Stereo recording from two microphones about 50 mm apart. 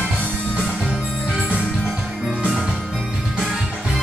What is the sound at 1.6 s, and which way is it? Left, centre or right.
Music, centre.